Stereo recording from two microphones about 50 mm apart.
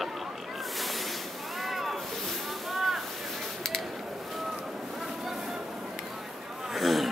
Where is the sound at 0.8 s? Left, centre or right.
Centre.